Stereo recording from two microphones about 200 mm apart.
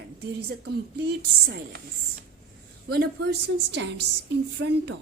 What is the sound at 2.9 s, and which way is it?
Speech, 55° right (ahead or behind).